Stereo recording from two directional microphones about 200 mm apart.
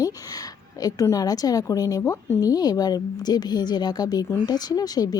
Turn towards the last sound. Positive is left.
turn(degrees=20)  # may be behind; listen again after turning